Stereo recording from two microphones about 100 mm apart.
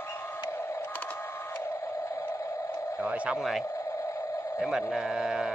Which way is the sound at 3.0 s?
15° right (ahead or behind).